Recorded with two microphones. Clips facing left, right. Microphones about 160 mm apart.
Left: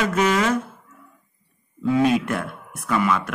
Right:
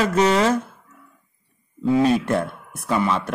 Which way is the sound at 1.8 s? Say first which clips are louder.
Right 1 dB; 25° right (ahead or behind).